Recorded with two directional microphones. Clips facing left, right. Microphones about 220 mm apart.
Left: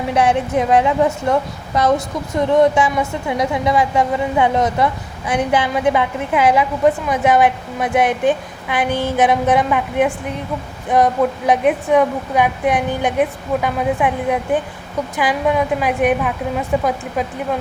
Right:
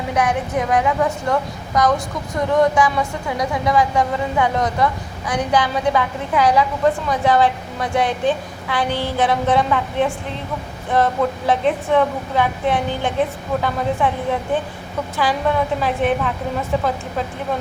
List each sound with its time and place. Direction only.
0.1 s a woman's voice: 25° left (ahead or behind)
8.9 s a sound: 45° left (ahead or behind)
9.1 s a woman's voice: 20° left (ahead or behind)